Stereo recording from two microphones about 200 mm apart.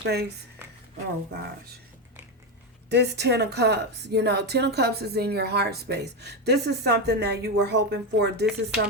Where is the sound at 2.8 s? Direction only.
55° right (ahead or behind).